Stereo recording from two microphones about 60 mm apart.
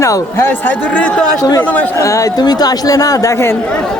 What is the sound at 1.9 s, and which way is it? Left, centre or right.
Speech, left.